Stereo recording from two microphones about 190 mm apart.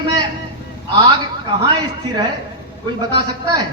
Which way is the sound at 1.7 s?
25° right (ahead or behind).